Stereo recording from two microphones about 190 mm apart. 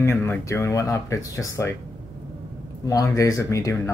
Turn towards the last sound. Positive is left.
turn(degrees=15)  # may be behind; listen again after turning